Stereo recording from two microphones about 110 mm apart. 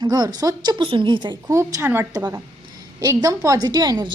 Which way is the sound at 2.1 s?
35° right (ahead or behind).